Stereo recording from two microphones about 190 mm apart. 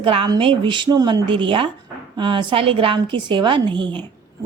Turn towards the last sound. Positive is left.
turn(degrees=-25)  # may be behind; listen again after turning